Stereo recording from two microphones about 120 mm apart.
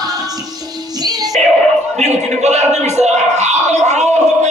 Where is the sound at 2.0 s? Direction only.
70° right (ahead or behind).